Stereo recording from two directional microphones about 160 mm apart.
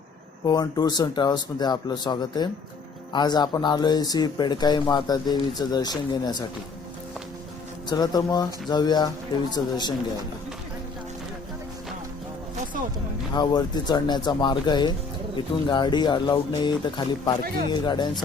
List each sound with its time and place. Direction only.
0.4 s speech: 25° left (ahead or behind)
7.9 s speech: 25° left (ahead or behind)
13.3 s speech: 25° left (ahead or behind)